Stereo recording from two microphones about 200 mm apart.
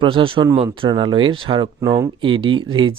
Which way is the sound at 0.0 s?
25° right (ahead or behind).